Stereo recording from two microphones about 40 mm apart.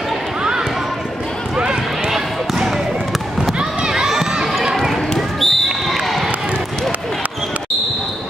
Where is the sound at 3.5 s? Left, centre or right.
Right.